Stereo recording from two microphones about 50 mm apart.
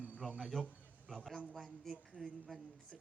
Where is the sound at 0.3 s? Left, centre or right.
Centre.